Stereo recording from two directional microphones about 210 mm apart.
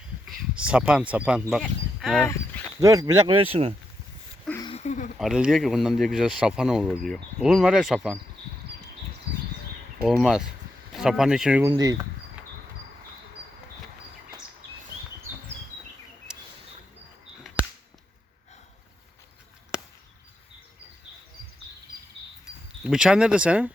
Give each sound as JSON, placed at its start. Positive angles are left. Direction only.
{"t": 0.3, "sound": "speech", "side_deg": -5}
{"t": 2.2, "sound": "a sound", "side_deg": 15}
{"t": 2.8, "sound": "speech", "side_deg": -15}
{"t": 4.6, "sound": "a sound", "side_deg": 30}
{"t": 5.1, "sound": "speech", "side_deg": -5}
{"t": 10.1, "sound": "speech", "side_deg": 0}
{"t": 11.6, "sound": "speech", "side_deg": -20}
{"t": 16.3, "sound": "a sound", "side_deg": -5}
{"t": 22.8, "sound": "speech", "side_deg": -5}